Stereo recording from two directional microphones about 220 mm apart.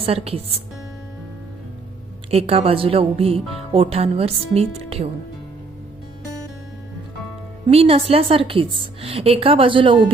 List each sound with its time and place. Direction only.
0.0 s a woman's voice: 25° right (ahead or behind)
2.3 s a woman's voice: 25° right (ahead or behind)
7.7 s a woman's voice: 25° right (ahead or behind)